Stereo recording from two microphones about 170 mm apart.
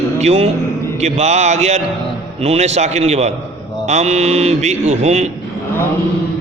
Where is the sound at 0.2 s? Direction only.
40° right (ahead or behind).